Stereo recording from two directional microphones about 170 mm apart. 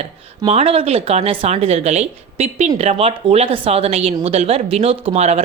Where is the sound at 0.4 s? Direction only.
35° right (ahead or behind).